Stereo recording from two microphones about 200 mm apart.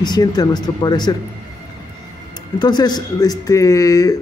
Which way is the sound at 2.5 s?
20° left (ahead or behind).